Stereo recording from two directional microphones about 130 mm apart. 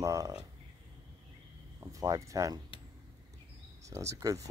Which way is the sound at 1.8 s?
25° right (ahead or behind).